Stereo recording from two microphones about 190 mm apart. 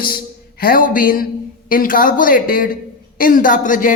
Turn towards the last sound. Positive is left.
turn(degrees=45)  # may be behind; listen again after turning